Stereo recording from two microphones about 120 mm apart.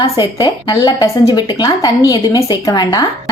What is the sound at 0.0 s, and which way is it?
A woman's voice, 30° left (ahead or behind).